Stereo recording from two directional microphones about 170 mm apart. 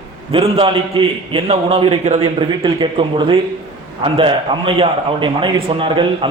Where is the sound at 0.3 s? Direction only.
35° right (ahead or behind).